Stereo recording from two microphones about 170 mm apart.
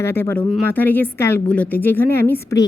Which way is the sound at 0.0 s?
15° left (ahead or behind).